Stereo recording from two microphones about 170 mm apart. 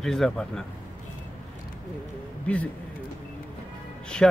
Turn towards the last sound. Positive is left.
turn(degrees=5)  # may be behind; listen again after turning